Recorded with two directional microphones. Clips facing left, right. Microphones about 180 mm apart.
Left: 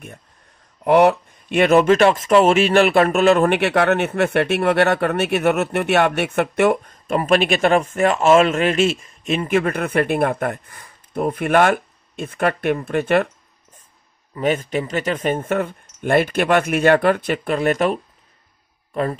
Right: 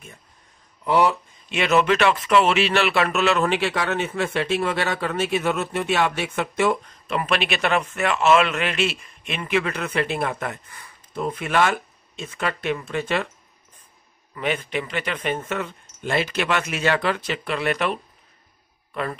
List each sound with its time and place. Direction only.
0.8 s speech: 60° left (ahead or behind)
14.3 s speech: 45° left (ahead or behind)